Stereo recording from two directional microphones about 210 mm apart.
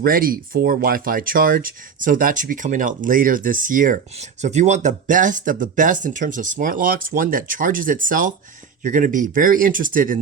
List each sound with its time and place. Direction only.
0.0 s speech: 45° right (ahead or behind)